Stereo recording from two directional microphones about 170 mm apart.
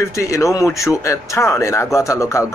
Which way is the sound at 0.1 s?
20° left (ahead or behind).